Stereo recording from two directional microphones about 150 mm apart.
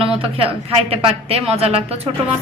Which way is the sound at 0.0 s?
35° right (ahead or behind).